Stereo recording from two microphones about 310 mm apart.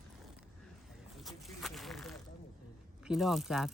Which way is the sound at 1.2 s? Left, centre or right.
Centre.